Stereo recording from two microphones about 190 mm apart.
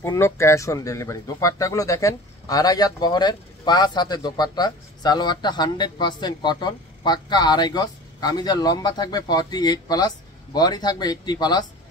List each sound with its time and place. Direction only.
0.0 s speech: 15° left (ahead or behind)